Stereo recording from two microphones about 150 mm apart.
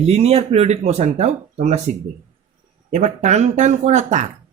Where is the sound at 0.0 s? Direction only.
40° right (ahead or behind).